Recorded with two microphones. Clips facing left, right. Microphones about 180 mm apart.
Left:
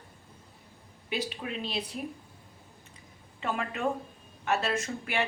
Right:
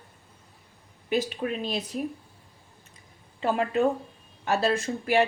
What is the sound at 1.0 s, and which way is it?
Speech, 45° right (ahead or behind).